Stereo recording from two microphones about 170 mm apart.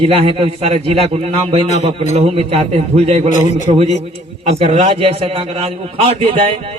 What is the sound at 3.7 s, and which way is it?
A man's voice, 40° right (ahead or behind).